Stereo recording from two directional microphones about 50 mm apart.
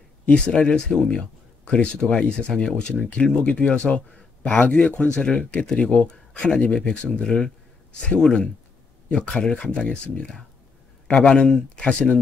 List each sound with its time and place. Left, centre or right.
0.3 s speech: centre